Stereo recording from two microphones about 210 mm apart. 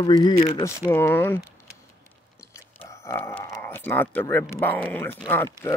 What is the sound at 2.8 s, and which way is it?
Speech, 15° left (ahead or behind).